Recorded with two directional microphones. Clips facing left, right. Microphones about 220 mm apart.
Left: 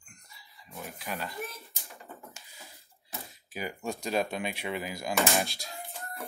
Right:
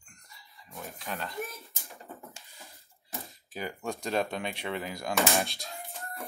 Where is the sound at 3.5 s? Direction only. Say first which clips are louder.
Even; 10° left (ahead or behind).